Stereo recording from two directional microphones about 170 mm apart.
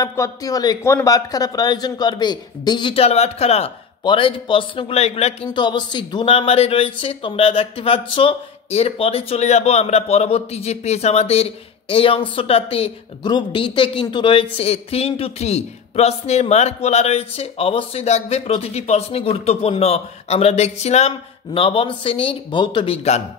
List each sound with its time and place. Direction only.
0.0 s a man's voice: 20° left (ahead or behind); by 23.2 s 35° left (ahead or behind)